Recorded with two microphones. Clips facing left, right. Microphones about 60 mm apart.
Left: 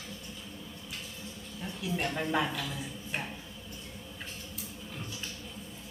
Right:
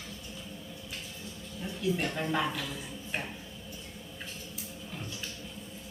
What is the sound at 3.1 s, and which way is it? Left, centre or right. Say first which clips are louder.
Dishes: even; centre.